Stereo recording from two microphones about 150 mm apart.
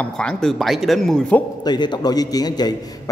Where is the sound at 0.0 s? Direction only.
5° left (ahead or behind).